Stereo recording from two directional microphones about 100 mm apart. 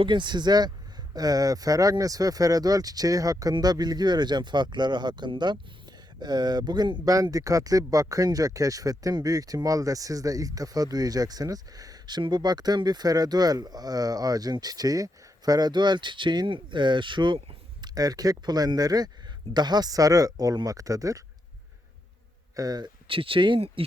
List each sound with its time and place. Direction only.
0.0 s speech: 50° right (ahead or behind)
7.1 s speech: 35° right (ahead or behind); by 17.6 s 60° right (ahead or behind)
17.8 s speech: 40° right (ahead or behind)
22.5 s speech: 40° right (ahead or behind)
23.0 s speech: 65° right (ahead or behind)